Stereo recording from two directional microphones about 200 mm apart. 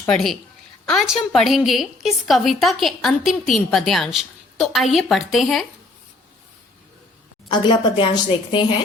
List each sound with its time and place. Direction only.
0.1 s a woman's voice: centre (ahead or behind)
7.5 s a woman's voice: 20° left (ahead or behind)